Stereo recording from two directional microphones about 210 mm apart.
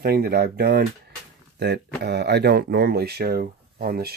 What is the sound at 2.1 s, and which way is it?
Speech, 55° right (ahead or behind).